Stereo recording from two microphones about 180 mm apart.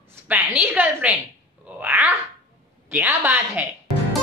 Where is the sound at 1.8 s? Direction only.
5° right (ahead or behind).